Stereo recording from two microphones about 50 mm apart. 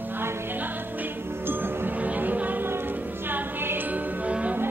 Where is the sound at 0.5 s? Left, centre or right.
Right.